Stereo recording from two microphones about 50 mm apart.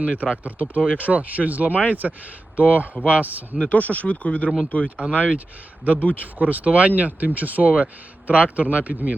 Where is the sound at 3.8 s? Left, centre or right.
Left.